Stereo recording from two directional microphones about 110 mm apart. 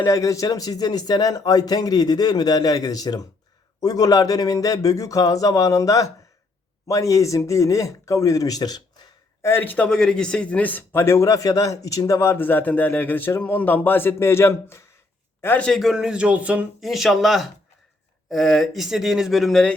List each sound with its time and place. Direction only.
0.0 s speech: 30° left (ahead or behind)
9.4 s a man's voice: 20° left (ahead or behind)
15.6 s speech: centre (ahead or behind)